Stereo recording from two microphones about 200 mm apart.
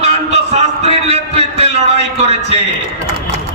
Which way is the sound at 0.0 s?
30° right (ahead or behind).